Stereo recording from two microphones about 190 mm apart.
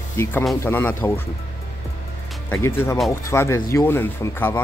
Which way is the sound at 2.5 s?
15° left (ahead or behind).